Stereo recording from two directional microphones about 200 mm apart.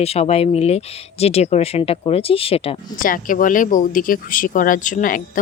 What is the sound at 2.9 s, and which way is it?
Speech, 45° left (ahead or behind).